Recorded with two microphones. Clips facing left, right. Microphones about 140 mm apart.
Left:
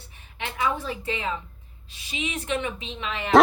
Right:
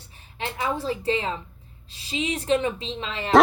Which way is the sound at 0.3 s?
35° right (ahead or behind).